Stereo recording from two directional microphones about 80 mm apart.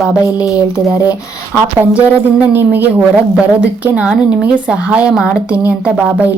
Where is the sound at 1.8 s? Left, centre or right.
Centre.